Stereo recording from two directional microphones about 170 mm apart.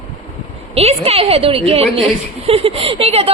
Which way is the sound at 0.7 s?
35° right (ahead or behind).